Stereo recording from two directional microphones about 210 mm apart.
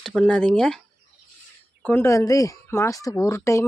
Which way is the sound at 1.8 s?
10° left (ahead or behind).